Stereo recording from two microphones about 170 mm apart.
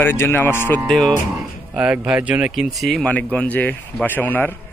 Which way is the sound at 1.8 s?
10° right (ahead or behind).